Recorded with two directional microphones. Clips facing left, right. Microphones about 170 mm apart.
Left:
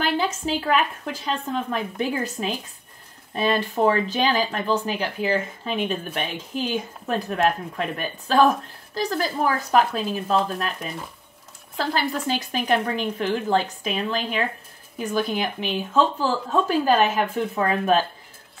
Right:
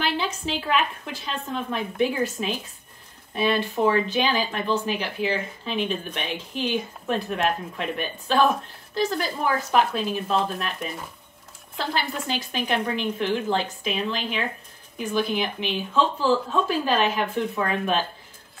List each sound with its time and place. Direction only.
0.0 s speech: 45° left (ahead or behind)
11.8 s speech: 45° left (ahead or behind)